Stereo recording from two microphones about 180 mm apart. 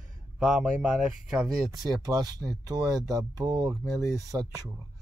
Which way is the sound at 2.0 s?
20° right (ahead or behind).